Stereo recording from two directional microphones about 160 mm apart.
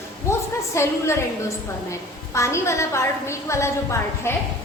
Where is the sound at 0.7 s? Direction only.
15° left (ahead or behind).